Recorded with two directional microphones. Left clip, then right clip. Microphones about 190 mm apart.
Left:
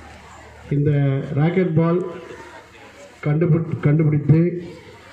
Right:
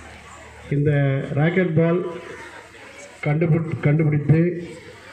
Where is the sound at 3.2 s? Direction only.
60° left (ahead or behind).